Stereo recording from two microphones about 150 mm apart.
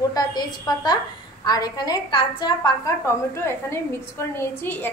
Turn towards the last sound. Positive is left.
turn(degrees=15)  # may be behind; listen again after turning